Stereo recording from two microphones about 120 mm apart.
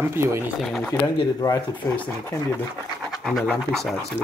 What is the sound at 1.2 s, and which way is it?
Speech, 30° left (ahead or behind).